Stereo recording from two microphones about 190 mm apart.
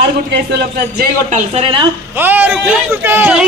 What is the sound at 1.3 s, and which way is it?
Speech, 30° right (ahead or behind).